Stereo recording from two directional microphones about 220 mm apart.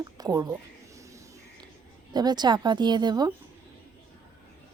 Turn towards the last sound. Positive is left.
turn(degrees=-20)  # may be behind; listen again after turning